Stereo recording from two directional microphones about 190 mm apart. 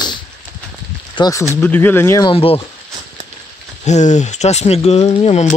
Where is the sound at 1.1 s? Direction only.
20° left (ahead or behind).